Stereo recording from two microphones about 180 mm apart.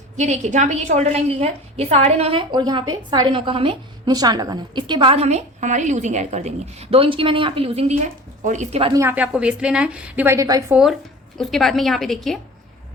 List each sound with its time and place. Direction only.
0.2 s a woman's voice: 40° right (ahead or behind)
8.8 s a woman's voice: 20° right (ahead or behind)
11.3 s a woman's voice: centre (ahead or behind)